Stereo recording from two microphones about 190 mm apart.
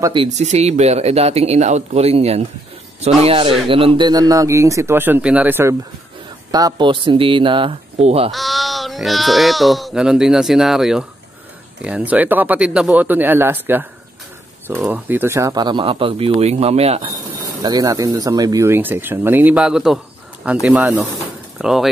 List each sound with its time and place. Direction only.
0.0 s speech: 25° right (ahead or behind)
0.3 s a man's voice: 35° right (ahead or behind); by 5.8 s 10° right (ahead or behind)
6.5 s speech: 20° right (ahead or behind)
8.3 s a man's voice: centre (ahead or behind); by 17.2 s 35° right (ahead or behind)
17.6 s a man's voice: 20° right (ahead or behind); by 21.8 s 5° right (ahead or behind)